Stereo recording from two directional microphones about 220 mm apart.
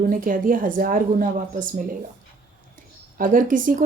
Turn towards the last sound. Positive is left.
turn(degrees=-35)  # may be behind; listen again after turning